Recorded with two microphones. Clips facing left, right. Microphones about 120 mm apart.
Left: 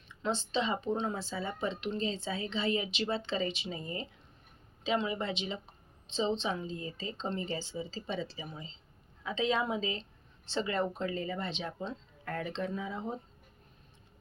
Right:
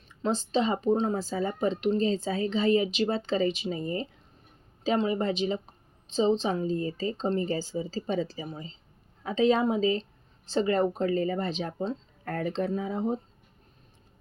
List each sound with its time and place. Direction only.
0.1 s speech: 40° right (ahead or behind)